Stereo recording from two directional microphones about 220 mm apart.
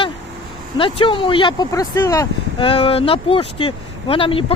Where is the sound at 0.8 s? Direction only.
25° left (ahead or behind).